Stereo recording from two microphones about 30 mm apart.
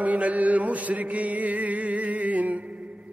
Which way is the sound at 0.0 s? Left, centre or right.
Right.